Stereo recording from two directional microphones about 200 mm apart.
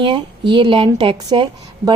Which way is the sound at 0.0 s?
25° right (ahead or behind).